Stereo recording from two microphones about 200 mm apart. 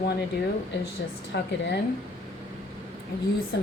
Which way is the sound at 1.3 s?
55° left (ahead or behind).